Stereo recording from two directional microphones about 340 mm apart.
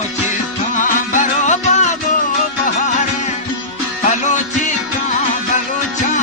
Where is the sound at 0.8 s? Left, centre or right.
Left.